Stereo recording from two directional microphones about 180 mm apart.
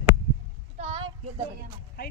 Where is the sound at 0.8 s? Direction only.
35° right (ahead or behind).